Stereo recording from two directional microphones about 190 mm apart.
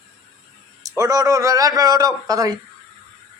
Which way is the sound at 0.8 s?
15° right (ahead or behind).